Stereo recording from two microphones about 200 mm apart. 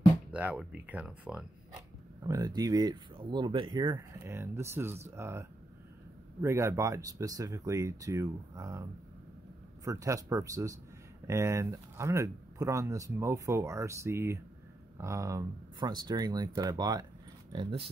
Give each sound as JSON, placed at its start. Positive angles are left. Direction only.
{"t": 0.3, "sound": "speech", "side_deg": -5}
{"t": 2.2, "sound": "speech", "side_deg": -15}
{"t": 9.8, "sound": "speech", "side_deg": -15}